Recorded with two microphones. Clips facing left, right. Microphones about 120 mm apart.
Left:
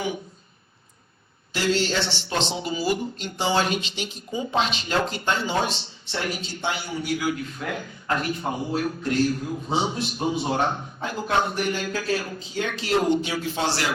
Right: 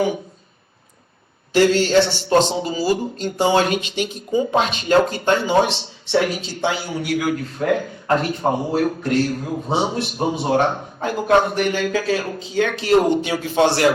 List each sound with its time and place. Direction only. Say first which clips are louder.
1.5 s speech: right 9 dB; 50° right (ahead or behind); by 6.9 s 80° right
6.9 s a man's voice: right 5 dB; 55° right (ahead or behind)